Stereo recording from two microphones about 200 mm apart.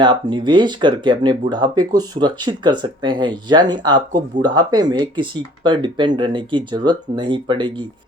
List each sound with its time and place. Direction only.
0.0 s speech: 25° right (ahead or behind)